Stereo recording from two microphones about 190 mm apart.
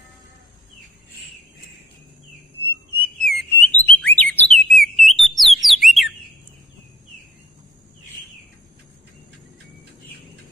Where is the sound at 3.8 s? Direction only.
5° left (ahead or behind).